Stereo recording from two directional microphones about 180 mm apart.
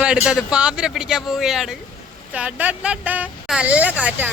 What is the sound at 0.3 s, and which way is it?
Speech, 5° right (ahead or behind).